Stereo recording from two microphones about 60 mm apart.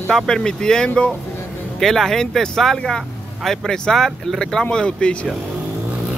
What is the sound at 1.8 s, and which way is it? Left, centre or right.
Speech, centre.